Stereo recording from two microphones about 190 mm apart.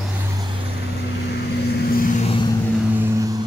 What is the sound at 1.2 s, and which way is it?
Vehicle, 60° left (ahead or behind).